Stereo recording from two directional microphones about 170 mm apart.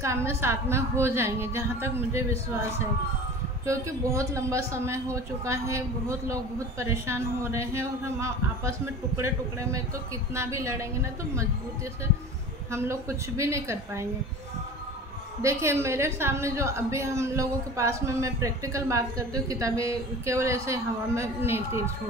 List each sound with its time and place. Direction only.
0.0 s a woman's voice: 15° right (ahead or behind)
3.6 s a woman's voice: 20° right (ahead or behind)
13.4 s a woman's voice: 15° right (ahead or behind)
15.4 s a woman's voice: 15° right (ahead or behind)